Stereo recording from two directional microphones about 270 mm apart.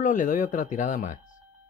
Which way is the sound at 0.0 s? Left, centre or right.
Left.